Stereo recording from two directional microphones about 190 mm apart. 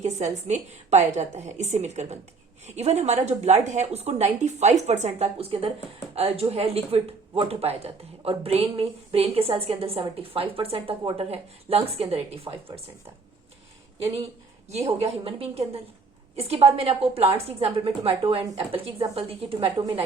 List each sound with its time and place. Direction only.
0.3 s speech: 35° right (ahead or behind)
14.7 s a woman's voice: 35° right (ahead or behind)